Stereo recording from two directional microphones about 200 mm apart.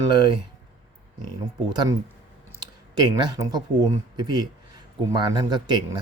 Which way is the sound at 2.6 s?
20° right (ahead or behind).